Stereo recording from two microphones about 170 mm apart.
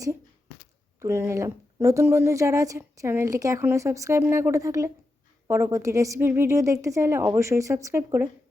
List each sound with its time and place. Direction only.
1.0 s a woman's voice: 15° right (ahead or behind)